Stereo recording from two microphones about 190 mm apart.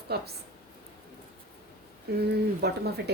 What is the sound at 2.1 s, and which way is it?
Speech, 55° right (ahead or behind).